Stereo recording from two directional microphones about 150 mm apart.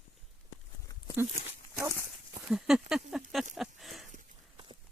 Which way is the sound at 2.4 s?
5° right (ahead or behind).